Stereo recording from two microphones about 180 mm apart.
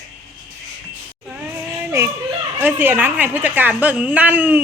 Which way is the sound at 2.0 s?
15° right (ahead or behind).